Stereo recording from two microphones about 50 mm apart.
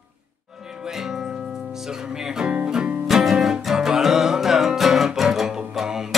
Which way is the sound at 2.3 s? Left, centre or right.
Centre.